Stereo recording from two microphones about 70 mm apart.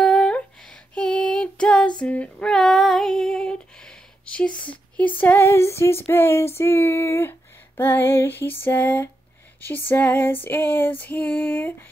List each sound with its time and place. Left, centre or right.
0.0 s female singing: centre; by 5.4 s left
5.4 s female singing: left